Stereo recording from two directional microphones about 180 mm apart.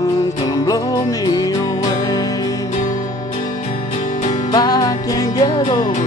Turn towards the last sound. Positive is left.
turn(degrees=25)  # may be behind; listen again after turning